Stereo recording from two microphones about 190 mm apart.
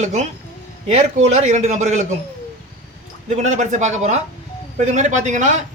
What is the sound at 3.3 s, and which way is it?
Speech, 40° right (ahead or behind).